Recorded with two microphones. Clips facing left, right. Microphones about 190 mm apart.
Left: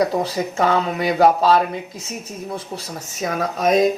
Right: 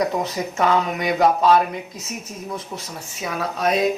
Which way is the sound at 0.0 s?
35° left (ahead or behind).